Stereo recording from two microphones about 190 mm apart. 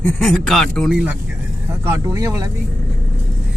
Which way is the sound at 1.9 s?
15° right (ahead or behind).